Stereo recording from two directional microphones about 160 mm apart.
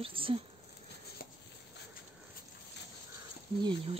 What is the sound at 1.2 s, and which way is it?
Chopping, 65° left (ahead or behind).